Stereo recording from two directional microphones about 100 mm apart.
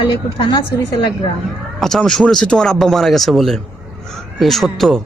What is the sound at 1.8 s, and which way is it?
A man's voice, 5° left (ahead or behind).